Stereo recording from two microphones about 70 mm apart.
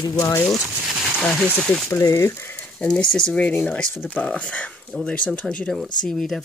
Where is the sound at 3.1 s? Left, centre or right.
Centre.